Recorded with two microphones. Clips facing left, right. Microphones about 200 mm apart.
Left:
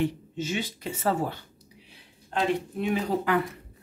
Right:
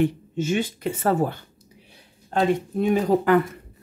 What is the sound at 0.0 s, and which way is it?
A woman's voice, 50° right (ahead or behind).